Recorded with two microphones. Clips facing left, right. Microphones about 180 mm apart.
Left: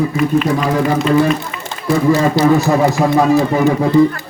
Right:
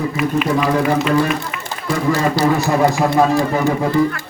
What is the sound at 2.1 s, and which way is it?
Speech, 20° left (ahead or behind).